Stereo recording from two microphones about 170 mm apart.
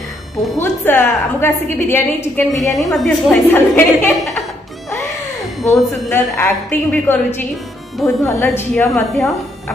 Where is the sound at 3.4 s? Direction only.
10° left (ahead or behind).